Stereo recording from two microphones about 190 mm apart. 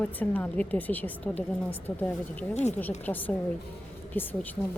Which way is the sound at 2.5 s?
35° left (ahead or behind).